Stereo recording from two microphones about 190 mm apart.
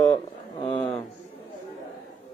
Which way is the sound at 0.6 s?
25° left (ahead or behind).